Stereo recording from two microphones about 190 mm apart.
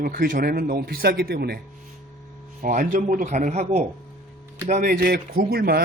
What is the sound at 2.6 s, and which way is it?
Speech, 45° right (ahead or behind).